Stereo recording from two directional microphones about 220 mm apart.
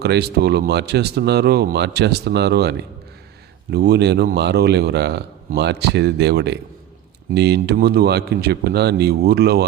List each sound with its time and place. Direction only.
0.0 s speech: 45° right (ahead or behind)